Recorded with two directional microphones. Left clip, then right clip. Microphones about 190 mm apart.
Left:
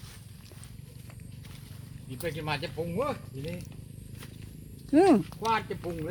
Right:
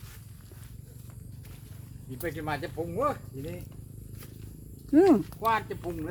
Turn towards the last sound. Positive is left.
turn(degrees=-10)  # may be behind; listen again after turning